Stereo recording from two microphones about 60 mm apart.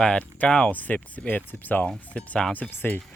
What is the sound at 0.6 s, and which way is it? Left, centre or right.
Speech, left.